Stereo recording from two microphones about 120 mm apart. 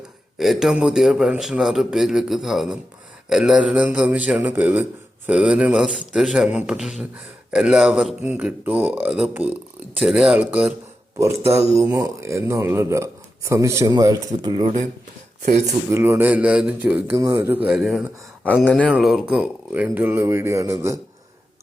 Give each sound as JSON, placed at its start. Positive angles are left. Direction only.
{"t": 0.3, "sound": "a man's voice", "side_deg": 0}
{"t": 11.7, "sound": "speech", "side_deg": -30}
{"t": 15.6, "sound": "speech", "side_deg": -20}
{"t": 17.2, "sound": "speech", "side_deg": -25}
{"t": 17.7, "sound": "a man's voice", "side_deg": 0}
{"t": 18.6, "sound": "speech", "side_deg": 10}
{"t": 18.9, "sound": "speech", "side_deg": -5}